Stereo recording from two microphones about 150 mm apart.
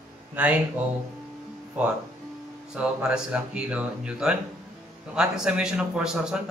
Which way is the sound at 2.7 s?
5° right (ahead or behind).